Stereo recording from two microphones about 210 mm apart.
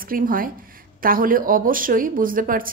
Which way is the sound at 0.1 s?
40° right (ahead or behind).